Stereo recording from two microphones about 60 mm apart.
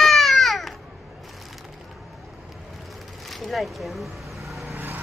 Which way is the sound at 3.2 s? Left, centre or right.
Centre.